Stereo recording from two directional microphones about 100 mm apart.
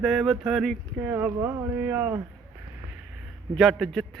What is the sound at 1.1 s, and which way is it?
Speech, 20° right (ahead or behind).